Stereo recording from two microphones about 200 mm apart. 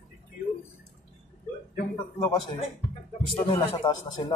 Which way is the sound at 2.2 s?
25° left (ahead or behind).